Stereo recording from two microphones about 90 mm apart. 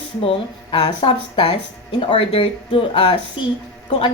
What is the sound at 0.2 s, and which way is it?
Speech, 90° left.